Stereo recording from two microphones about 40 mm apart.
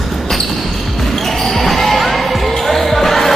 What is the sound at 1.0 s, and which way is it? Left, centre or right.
Basketball bounce, centre.